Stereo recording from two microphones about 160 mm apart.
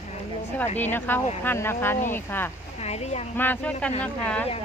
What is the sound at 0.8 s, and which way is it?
Speech, 10° left (ahead or behind).